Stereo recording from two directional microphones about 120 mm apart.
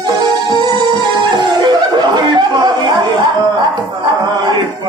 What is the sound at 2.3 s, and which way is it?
Chatter, 35° right (ahead or behind).